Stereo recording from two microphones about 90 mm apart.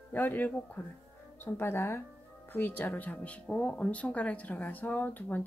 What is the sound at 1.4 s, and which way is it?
Speech, 25° left (ahead or behind).